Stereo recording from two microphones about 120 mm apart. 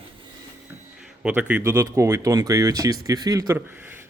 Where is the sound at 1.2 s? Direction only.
10° right (ahead or behind).